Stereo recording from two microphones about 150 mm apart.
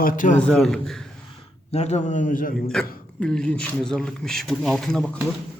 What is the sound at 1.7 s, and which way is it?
Speech, 45° left (ahead or behind).